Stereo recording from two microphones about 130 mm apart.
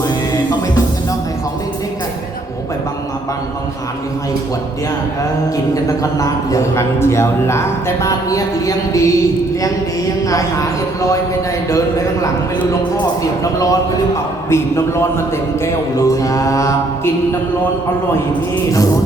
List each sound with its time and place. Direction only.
5.7 s a man's voice: 25° left (ahead or behind)
10.2 s a man's voice: 25° left (ahead or behind)
13.4 s a man's voice: 25° left (ahead or behind)